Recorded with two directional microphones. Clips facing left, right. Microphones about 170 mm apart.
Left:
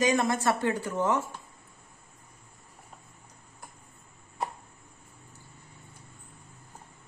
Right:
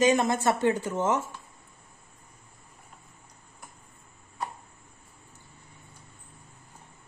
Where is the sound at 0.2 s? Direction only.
20° right (ahead or behind).